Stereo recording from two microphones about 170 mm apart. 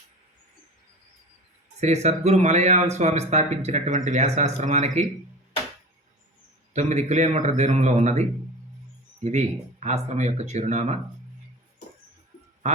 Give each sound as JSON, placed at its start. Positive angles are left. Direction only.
{"t": 1.8, "sound": "speech", "side_deg": -40}
{"t": 6.7, "sound": "speech", "side_deg": -45}
{"t": 12.6, "sound": "speech", "side_deg": -40}